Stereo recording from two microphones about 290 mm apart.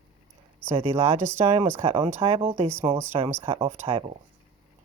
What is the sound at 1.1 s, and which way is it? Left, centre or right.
Speech, centre.